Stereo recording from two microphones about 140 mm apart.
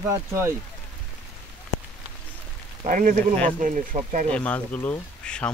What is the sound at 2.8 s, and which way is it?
Speech, 65° right (ahead or behind).